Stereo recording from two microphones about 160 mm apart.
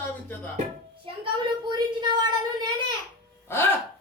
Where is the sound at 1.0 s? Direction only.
30° right (ahead or behind).